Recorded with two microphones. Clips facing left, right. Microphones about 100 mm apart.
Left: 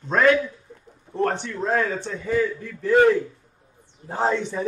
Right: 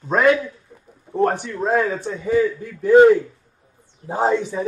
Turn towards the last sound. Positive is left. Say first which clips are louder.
# right 4 dB
turn(degrees=-5)  # may be behind; listen again after turning